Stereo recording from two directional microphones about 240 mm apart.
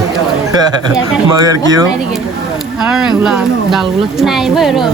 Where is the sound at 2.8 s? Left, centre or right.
Centre.